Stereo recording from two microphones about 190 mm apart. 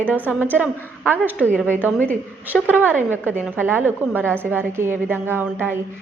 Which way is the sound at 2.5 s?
10° right (ahead or behind).